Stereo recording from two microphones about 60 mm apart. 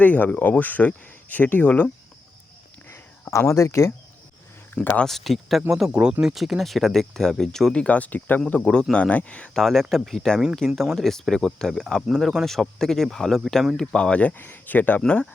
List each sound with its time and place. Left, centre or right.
0.0 s speech: left
3.2 s speech: left
5.0 s speech: centre
7.7 s speech: left
8.7 s speech: centre
9.6 s speech: centre
13.7 s speech: centre; by 15.0 s left
15.0 s speech: centre